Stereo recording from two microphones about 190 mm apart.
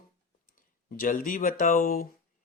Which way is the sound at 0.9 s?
45° left (ahead or behind).